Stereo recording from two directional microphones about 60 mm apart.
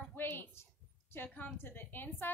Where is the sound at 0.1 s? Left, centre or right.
Left.